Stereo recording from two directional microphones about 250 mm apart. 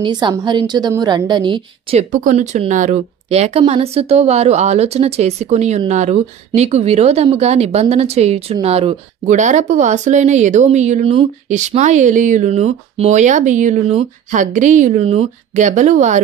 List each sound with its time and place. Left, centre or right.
0.0 s a woman's voice: centre